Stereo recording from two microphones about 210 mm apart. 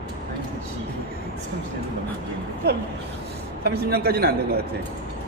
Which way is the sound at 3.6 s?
50° right (ahead or behind).